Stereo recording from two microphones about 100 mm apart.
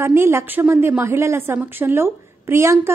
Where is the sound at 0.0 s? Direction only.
25° right (ahead or behind).